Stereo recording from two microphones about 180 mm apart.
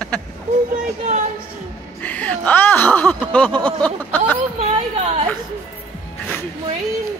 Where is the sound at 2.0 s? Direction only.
10° left (ahead or behind).